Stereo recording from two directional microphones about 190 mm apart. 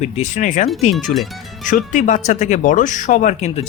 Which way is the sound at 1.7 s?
40° left (ahead or behind).